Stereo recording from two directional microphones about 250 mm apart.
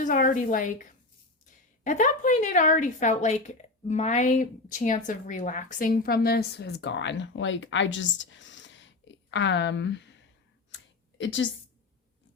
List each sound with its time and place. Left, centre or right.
0.0 s a woman's voice: left